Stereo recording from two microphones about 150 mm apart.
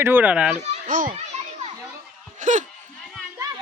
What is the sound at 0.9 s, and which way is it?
Speech, 65° right (ahead or behind).